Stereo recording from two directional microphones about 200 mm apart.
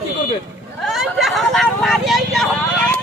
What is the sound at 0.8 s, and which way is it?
Speech, centre (ahead or behind).